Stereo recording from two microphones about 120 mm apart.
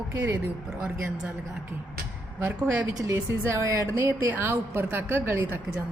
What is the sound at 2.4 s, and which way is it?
A woman's voice, 15° right (ahead or behind).